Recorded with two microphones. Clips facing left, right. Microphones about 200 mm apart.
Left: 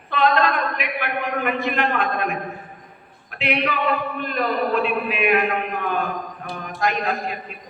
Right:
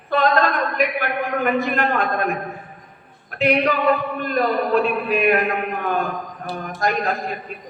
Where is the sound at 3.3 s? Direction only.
45° right (ahead or behind).